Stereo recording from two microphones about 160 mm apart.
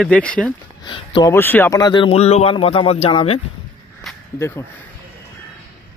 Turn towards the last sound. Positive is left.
turn(degrees=15)  # may be behind; listen again after turning